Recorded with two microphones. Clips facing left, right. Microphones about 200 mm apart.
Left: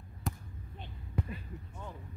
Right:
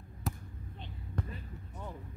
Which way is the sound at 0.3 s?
Centre (ahead or behind).